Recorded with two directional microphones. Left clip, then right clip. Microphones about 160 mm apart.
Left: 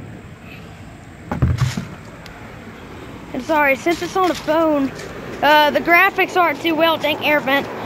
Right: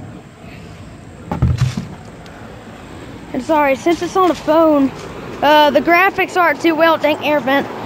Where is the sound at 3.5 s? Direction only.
25° right (ahead or behind).